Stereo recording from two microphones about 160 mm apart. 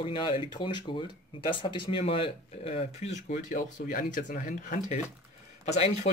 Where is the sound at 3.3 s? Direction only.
55° left (ahead or behind).